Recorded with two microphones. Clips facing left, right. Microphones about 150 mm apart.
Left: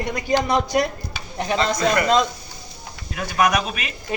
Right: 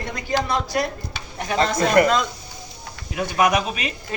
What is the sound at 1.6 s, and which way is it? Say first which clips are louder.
Speech: right 4 dB; 50° right (ahead or behind).